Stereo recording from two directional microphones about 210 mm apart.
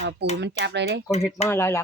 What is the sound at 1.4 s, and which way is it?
Speech, 10° left (ahead or behind).